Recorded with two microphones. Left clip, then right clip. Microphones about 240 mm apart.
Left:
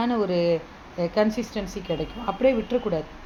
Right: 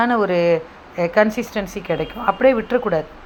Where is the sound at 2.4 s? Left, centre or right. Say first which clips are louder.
Right 5 dB; centre.